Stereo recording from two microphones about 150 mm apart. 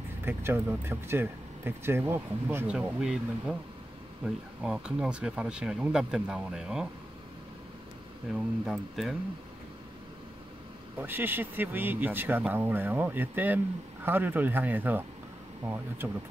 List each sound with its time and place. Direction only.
0.2 s speech: 15° right (ahead or behind)
4.6 s speech: 5° right (ahead or behind)
8.3 s speech: centre (ahead or behind)
11.0 s speech: 15° right (ahead or behind)